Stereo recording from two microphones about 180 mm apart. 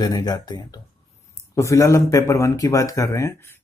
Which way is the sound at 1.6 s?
15° left (ahead or behind).